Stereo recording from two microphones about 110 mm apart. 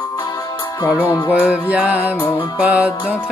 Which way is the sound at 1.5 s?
10° right (ahead or behind).